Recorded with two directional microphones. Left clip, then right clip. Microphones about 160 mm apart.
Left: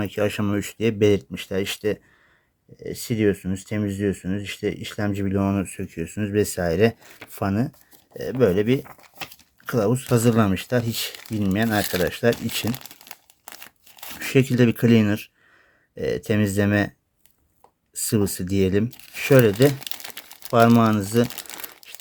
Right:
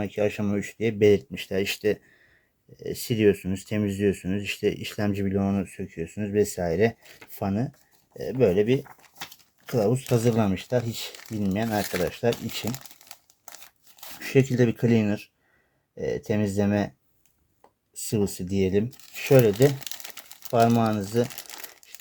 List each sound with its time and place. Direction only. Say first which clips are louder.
0.0 s speech: left 2 dB; 30° left (ahead or behind); by 5.3 s 10° left (ahead or behind)
5.3 s speech: left 3 dB; 35° left (ahead or behind)
10.1 s speech: left 4 dB; 35° left (ahead or behind)
12.7 s crumpling: left 4 dB; centre (ahead or behind)
14.2 s speech: left 2 dB; 40° left (ahead or behind)
17.9 s speech: left 4 dB; 40° left (ahead or behind)
19.8 s crumpling: left 4 dB; 10° left (ahead or behind)
20.5 s speech: left 4 dB; 40° left (ahead or behind)